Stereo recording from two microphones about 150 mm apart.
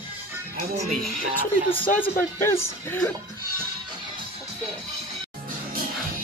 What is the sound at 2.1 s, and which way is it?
Speech, 15° left (ahead or behind).